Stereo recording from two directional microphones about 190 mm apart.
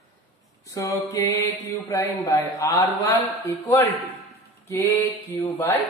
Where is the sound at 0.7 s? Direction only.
20° left (ahead or behind).